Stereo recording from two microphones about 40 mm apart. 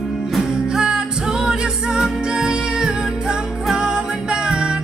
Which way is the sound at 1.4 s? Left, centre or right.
Centre.